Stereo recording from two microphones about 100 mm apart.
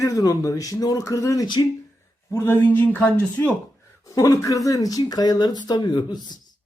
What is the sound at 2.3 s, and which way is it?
Speech, 25° left (ahead or behind).